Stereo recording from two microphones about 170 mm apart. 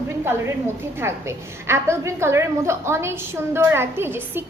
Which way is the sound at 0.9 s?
15° right (ahead or behind).